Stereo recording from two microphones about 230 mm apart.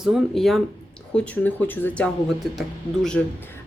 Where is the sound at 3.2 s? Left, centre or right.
Centre.